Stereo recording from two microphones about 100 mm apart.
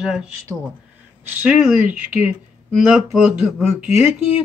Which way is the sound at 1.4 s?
10° right (ahead or behind).